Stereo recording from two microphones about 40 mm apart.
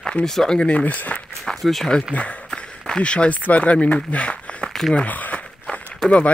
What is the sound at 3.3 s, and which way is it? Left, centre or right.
Speech, left.